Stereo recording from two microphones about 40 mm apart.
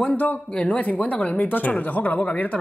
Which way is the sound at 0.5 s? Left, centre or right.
Left.